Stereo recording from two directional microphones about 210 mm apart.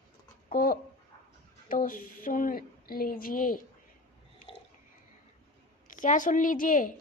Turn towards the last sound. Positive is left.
turn(degrees=40)  # may be behind; listen again after turning